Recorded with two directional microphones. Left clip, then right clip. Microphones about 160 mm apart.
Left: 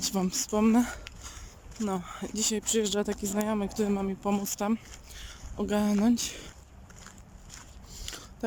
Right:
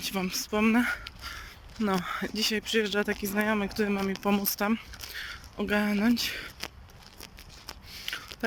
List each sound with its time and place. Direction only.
0.0 s speech: 35° left (ahead or behind)
1.8 s speech: 10° left (ahead or behind)
7.9 s a sound: 30° left (ahead or behind)